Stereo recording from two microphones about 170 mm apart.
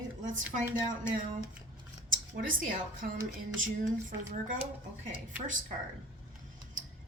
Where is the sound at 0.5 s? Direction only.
50° right (ahead or behind).